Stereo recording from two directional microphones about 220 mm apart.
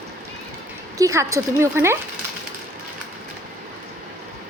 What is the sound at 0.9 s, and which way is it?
Speech, 15° right (ahead or behind).